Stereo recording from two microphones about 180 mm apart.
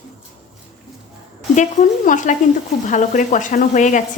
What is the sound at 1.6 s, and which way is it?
Speech, 45° left (ahead or behind).